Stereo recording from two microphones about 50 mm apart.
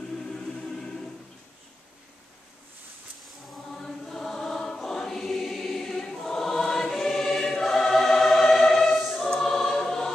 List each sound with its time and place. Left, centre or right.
0.1 s music: centre
3.7 s choir: centre